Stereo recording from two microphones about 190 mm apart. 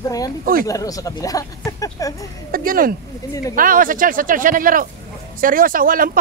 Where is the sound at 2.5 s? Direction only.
50° right (ahead or behind).